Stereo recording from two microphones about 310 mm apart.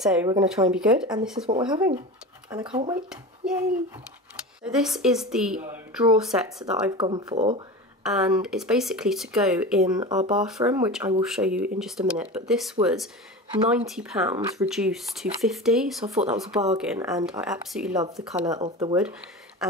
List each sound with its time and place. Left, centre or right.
0.0 s speech: centre
4.6 s speech: centre
8.0 s speech: centre
9.9 s speech: centre
19.6 s speech: centre